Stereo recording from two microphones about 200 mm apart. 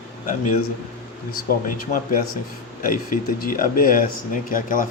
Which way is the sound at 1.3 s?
45° left (ahead or behind).